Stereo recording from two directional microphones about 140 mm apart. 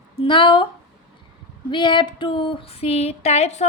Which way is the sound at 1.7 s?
35° left (ahead or behind).